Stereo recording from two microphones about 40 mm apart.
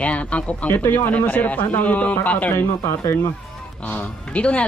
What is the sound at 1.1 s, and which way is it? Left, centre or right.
Speech, left.